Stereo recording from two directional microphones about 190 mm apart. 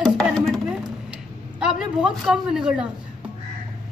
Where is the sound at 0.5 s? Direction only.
Centre (ahead or behind).